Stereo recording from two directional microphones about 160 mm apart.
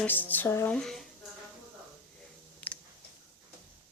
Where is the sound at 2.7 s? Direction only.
10° left (ahead or behind).